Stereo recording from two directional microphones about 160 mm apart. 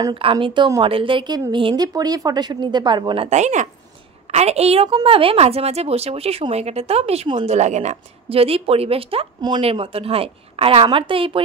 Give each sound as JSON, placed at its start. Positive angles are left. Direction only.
{"t": 0.1, "sound": "a woman's voice", "side_deg": -35}
{"t": 3.3, "sound": "a woman's voice", "side_deg": -45}